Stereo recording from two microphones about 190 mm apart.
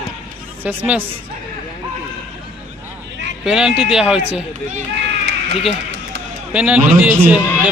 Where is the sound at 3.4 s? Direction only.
5° right (ahead or behind).